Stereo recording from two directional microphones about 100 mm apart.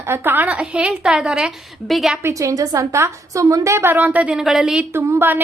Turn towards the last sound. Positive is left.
turn(degrees=-20)  # may be behind; listen again after turning